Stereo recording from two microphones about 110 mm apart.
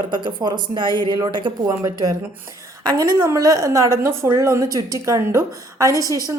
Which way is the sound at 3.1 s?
30° right (ahead or behind).